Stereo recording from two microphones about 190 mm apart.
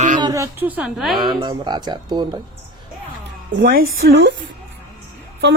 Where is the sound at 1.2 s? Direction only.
25° right (ahead or behind).